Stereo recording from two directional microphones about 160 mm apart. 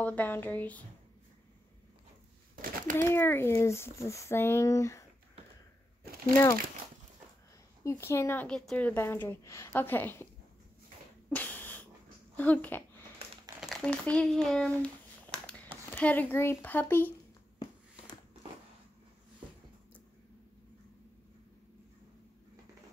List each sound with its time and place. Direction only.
0.0 s a woman's voice: 10° left (ahead or behind)
2.5 s a sound: 60° right (ahead or behind)
3.0 s a woman's voice: 15° left (ahead or behind)
6.0 s crumpling: 70° right (ahead or behind)
7.8 s a woman's voice: 20° left (ahead or behind)
11.2 s dog: 10° left (ahead or behind)
12.4 s a woman's voice: 10° left (ahead or behind)